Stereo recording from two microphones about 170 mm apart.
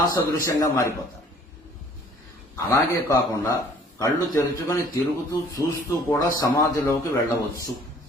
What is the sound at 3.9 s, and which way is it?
Speech, 20° left (ahead or behind).